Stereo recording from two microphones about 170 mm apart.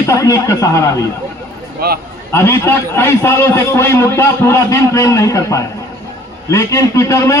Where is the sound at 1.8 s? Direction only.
65° right (ahead or behind).